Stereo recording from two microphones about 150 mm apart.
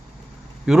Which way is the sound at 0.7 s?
5° right (ahead or behind).